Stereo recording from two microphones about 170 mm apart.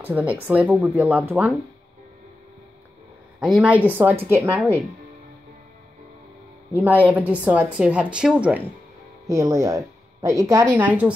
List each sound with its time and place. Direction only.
0.0 s speech: 10° right (ahead or behind)
3.3 s speech: 5° right (ahead or behind)
6.8 s speech: 10° right (ahead or behind)
9.3 s speech: 20° right (ahead or behind)